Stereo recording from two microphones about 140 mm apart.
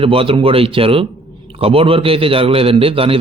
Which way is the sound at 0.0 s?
40° right (ahead or behind).